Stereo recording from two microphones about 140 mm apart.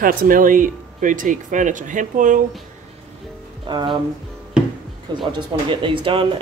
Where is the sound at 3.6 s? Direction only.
35° right (ahead or behind).